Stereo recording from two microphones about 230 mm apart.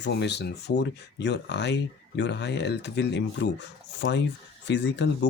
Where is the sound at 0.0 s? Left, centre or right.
Left.